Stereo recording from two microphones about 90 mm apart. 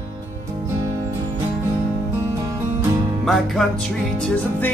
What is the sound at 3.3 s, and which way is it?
Music, 5° left (ahead or behind).